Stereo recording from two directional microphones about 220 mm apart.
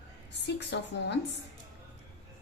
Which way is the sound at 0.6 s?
50° left (ahead or behind).